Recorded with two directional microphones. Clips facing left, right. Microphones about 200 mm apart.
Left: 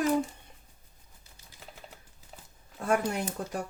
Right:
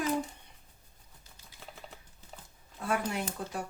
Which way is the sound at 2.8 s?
45° left (ahead or behind).